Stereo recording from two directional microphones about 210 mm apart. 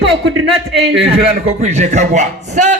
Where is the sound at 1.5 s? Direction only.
35° right (ahead or behind).